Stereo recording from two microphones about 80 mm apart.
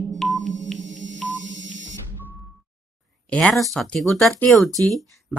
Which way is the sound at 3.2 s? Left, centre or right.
Centre.